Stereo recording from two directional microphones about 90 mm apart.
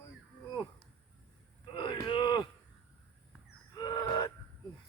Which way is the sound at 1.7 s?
60° left (ahead or behind).